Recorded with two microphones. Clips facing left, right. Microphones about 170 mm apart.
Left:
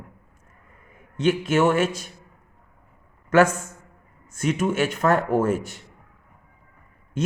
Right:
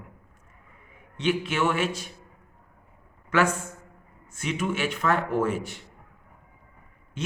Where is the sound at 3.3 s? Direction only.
45° left (ahead or behind).